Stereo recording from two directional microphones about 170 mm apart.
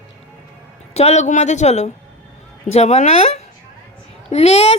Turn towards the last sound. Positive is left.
turn(degrees=35)  # may be behind; listen again after turning